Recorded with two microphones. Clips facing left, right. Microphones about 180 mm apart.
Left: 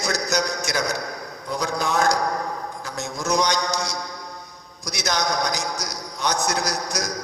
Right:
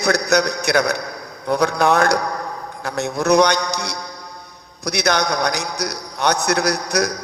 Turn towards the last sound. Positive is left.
turn(degrees=-65)  # may be behind; listen again after turning